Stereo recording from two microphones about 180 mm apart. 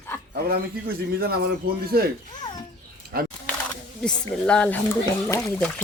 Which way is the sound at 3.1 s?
55° right (ahead or behind).